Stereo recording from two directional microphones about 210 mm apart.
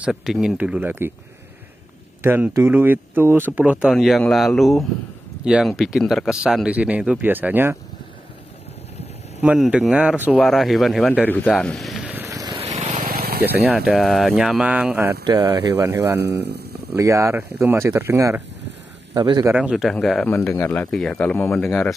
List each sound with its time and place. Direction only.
0.0 s speech: centre (ahead or behind)
2.2 s speech: 10° right (ahead or behind)
9.4 s speech: 5° right (ahead or behind)
12.6 s vehicle: 30° right (ahead or behind)
13.1 s vehicle: 45° right (ahead or behind)
13.7 s speech: centre (ahead or behind)
16.2 s speech: 50° right (ahead or behind)
16.9 s speech: 15° right (ahead or behind)
19.5 s speech: 5° right (ahead or behind)